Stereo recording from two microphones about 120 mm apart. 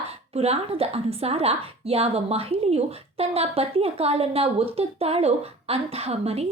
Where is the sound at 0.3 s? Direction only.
60° right (ahead or behind).